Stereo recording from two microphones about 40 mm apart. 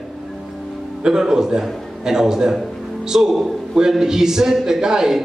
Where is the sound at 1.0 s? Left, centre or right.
Centre.